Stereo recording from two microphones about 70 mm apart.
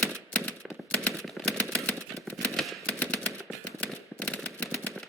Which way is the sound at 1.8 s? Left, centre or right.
Centre.